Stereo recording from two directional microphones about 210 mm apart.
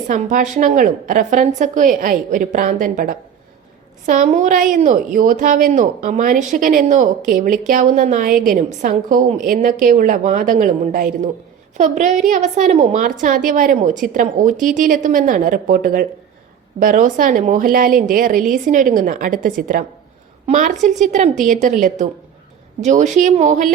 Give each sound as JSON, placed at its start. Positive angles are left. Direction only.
{"t": 0.1, "sound": "a woman's voice", "side_deg": -35}